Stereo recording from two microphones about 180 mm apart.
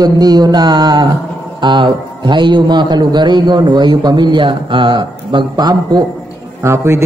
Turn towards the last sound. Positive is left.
turn(degrees=-15)  # may be behind; listen again after turning